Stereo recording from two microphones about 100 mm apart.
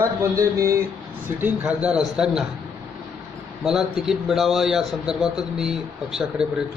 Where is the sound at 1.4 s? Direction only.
10° right (ahead or behind).